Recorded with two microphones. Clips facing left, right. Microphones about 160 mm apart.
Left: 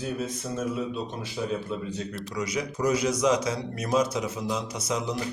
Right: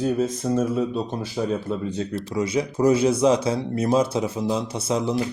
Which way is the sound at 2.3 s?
30° right (ahead or behind).